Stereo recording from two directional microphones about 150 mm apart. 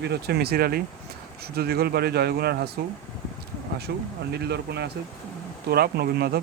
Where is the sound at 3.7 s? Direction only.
90° right.